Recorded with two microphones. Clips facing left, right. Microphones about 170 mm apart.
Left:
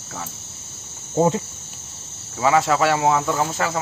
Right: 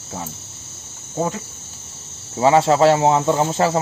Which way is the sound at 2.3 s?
30° right (ahead or behind).